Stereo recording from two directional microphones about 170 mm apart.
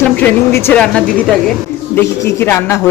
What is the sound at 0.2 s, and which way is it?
Speech, 10° left (ahead or behind).